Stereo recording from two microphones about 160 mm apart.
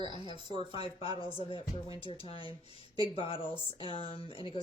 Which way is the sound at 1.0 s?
35° left (ahead or behind).